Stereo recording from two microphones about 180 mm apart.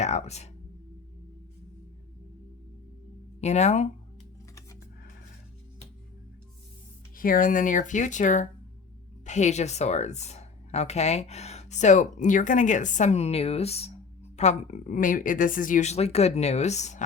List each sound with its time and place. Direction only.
0.0 s speech: 40° left (ahead or behind)
3.4 s speech: 40° left (ahead or behind)
7.2 s speech: 50° left (ahead or behind)